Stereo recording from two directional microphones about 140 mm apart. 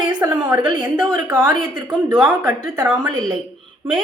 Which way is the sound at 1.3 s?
25° right (ahead or behind).